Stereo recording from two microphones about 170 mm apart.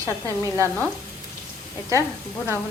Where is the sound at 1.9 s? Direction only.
20° right (ahead or behind).